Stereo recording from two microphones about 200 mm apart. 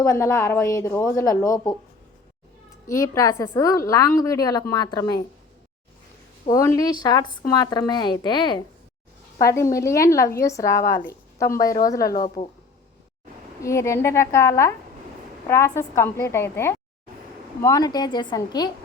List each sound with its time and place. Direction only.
0.0 s a woman's voice: 15° left (ahead or behind)
2.8 s a woman's voice: 15° left (ahead or behind)
6.4 s a woman's voice: 15° left (ahead or behind)
9.7 s a woman's voice: 15° left (ahead or behind)
11.4 s a woman's voice: 45° left (ahead or behind)
13.6 s a woman's voice: 15° left (ahead or behind)